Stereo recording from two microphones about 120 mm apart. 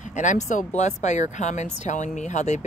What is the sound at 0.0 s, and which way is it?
Speech, 90° left.